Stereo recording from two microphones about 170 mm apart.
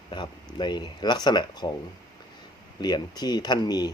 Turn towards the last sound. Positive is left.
turn(degrees=25)  # may be behind; listen again after turning